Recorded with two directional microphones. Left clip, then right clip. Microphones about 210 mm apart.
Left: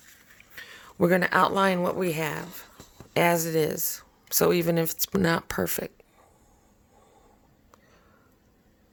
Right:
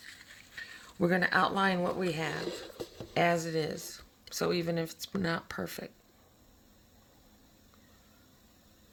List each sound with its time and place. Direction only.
0.5 s speech: 50° left (ahead or behind)